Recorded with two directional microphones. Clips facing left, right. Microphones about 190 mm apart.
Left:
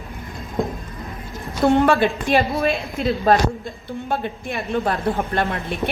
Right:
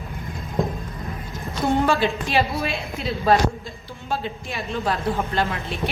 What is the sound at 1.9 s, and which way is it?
A man's voice, 55° left (ahead or behind).